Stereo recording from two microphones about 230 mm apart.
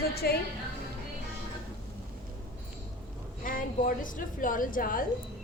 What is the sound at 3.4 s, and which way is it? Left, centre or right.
A woman's voice, left.